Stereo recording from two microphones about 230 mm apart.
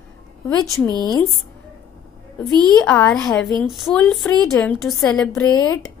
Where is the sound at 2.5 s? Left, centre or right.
Centre.